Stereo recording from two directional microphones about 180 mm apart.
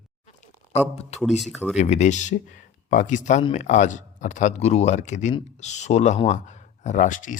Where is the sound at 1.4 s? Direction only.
Centre (ahead or behind).